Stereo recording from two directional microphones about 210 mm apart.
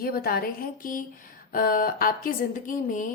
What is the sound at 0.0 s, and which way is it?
A woman's voice, 45° left (ahead or behind).